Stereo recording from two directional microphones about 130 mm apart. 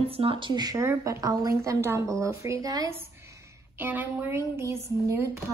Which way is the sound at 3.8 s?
15° right (ahead or behind).